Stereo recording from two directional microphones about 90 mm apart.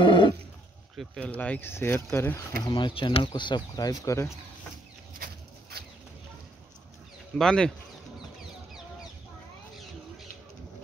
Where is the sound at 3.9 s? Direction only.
35° left (ahead or behind).